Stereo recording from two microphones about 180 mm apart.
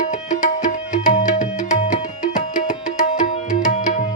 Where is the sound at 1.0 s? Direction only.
45° left (ahead or behind).